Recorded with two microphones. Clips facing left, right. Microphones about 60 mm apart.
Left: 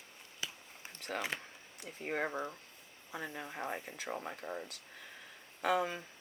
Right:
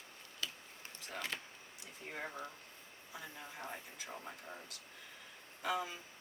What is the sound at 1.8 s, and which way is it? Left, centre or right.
Speech, left.